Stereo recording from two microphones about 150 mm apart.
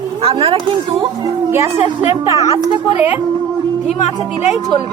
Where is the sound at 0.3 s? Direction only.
35° right (ahead or behind).